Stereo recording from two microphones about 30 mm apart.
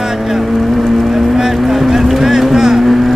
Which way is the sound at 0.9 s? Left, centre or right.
Centre.